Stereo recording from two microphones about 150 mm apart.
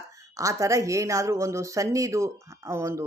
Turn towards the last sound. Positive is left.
turn(degrees=-20)  # may be behind; listen again after turning